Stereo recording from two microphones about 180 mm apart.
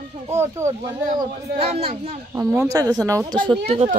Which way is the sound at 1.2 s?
35° right (ahead or behind).